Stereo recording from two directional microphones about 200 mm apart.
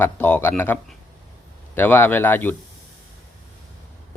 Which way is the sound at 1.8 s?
10° left (ahead or behind).